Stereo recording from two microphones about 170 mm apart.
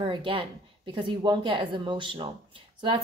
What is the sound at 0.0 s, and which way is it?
A woman's voice, 30° right (ahead or behind).